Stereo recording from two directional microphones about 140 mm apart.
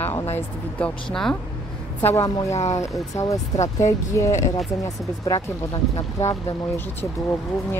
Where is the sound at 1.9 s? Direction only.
20° left (ahead or behind).